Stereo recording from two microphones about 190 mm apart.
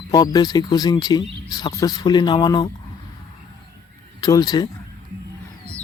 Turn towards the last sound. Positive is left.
turn(degrees=20)  # may be behind; listen again after turning